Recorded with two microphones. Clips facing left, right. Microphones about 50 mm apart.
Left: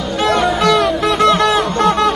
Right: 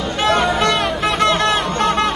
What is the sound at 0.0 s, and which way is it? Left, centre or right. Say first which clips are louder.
Music: left 2 dB; right.